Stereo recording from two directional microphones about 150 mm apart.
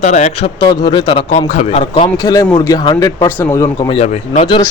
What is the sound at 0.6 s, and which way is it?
Speech, 30° left (ahead or behind).